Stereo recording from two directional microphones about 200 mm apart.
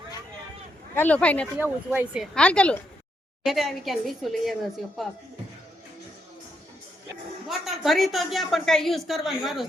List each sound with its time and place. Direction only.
0.9 s speech: 5° left (ahead or behind)
1.5 s speech: 10° right (ahead or behind)
2.3 s speech: 5° left (ahead or behind)
7.4 s speech: centre (ahead or behind)